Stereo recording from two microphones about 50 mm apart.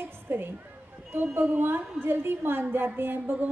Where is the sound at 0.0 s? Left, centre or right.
Right.